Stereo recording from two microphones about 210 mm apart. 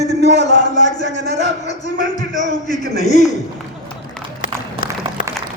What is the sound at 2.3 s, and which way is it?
Speech, 35° left (ahead or behind).